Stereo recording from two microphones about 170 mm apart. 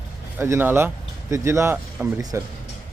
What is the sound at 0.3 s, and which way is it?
Speech, 15° right (ahead or behind).